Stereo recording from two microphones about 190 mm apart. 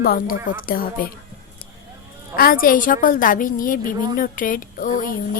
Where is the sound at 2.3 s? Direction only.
50° left (ahead or behind).